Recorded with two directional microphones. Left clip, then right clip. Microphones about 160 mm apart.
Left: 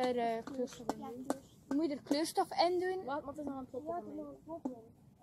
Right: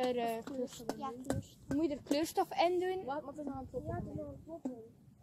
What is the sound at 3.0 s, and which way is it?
Speech, 5° left (ahead or behind).